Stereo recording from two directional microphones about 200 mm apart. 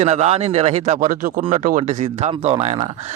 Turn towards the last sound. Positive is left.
turn(degrees=-35)  # may be behind; listen again after turning